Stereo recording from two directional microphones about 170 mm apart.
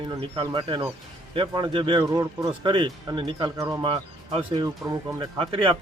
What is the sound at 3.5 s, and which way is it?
Speech, 20° right (ahead or behind).